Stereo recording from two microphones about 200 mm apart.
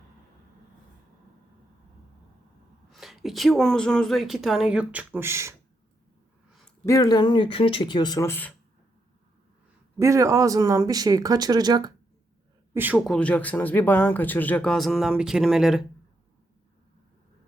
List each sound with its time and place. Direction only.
2.9 s speech: centre (ahead or behind)
6.8 s speech: 15° left (ahead or behind)
10.0 s speech: 15° right (ahead or behind)
12.7 s a woman's voice: 10° right (ahead or behind)
13.1 s speech: 5° left (ahead or behind)